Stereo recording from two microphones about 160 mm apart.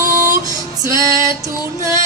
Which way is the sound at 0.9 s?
20° right (ahead or behind).